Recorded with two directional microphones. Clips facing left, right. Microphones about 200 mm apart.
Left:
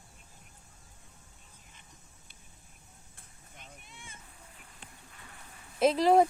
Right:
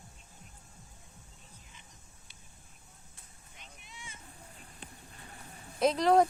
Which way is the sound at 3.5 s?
50° left (ahead or behind).